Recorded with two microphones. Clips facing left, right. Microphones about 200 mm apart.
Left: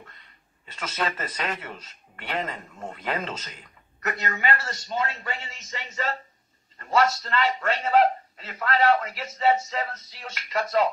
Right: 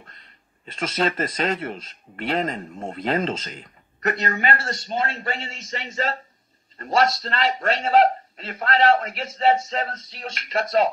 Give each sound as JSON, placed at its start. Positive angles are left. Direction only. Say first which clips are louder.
{"t": 0.7, "sound": "speech", "louder": "right 6 dB", "side_deg": -30}